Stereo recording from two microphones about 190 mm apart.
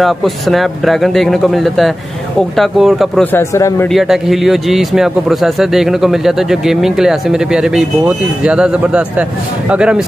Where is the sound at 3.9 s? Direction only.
Centre (ahead or behind).